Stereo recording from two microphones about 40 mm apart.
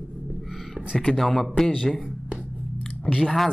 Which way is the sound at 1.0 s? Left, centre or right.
Centre.